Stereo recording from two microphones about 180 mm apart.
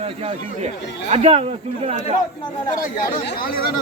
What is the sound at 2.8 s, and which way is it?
Speech, 50° left (ahead or behind).